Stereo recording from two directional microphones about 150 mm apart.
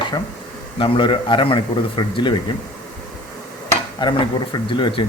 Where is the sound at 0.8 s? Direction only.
35° left (ahead or behind).